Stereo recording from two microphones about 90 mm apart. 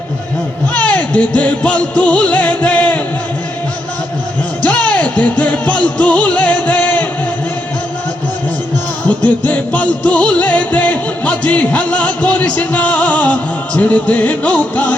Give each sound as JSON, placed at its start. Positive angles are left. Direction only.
{"t": 0.7, "sound": "music", "side_deg": 15}
{"t": 4.6, "sound": "music", "side_deg": 15}
{"t": 9.5, "sound": "music", "side_deg": 15}